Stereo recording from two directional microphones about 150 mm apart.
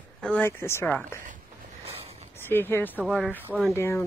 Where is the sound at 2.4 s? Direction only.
15° left (ahead or behind).